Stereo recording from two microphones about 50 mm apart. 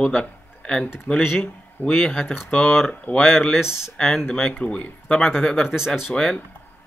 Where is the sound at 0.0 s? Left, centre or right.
Centre.